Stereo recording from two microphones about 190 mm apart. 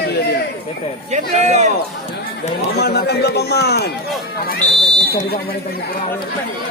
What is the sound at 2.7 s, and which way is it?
Speech, 60° left (ahead or behind).